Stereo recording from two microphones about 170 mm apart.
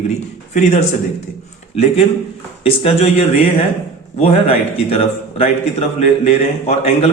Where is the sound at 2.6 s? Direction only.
35° left (ahead or behind).